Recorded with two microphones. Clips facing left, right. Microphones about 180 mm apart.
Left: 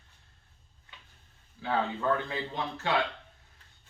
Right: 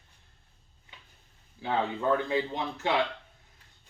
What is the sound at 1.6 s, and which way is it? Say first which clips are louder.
Speech: right 1 dB; 20° right (ahead or behind).